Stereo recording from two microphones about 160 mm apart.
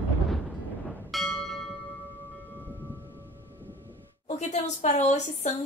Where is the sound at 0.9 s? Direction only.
Centre (ahead or behind).